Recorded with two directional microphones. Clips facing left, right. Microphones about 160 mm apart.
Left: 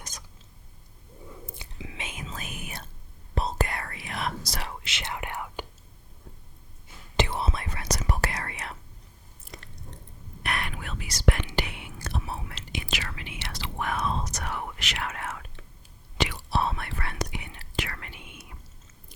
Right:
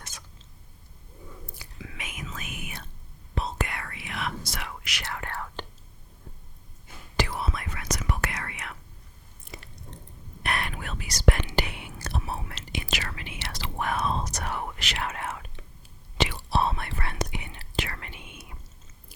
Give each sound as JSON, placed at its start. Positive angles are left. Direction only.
{"t": 0.1, "sound": "a sound", "side_deg": 40}
{"t": 1.5, "sound": "whispering", "side_deg": 20}
{"t": 7.2, "sound": "whispering", "side_deg": 25}
{"t": 9.4, "sound": "chewing", "side_deg": 0}
{"t": 10.4, "sound": "whispering", "side_deg": -35}
{"t": 10.8, "sound": "whispering", "side_deg": -45}